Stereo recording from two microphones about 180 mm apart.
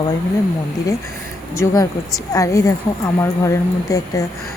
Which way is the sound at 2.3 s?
20° left (ahead or behind).